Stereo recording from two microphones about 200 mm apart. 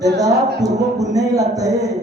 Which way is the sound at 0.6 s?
15° right (ahead or behind).